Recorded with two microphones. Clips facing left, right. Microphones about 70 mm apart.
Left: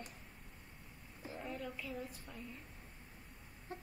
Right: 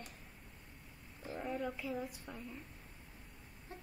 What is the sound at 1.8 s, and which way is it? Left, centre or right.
Speech, centre.